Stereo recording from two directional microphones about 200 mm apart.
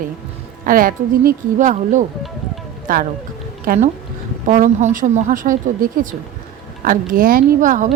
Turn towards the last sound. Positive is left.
turn(degrees=-40)  # may be behind; listen again after turning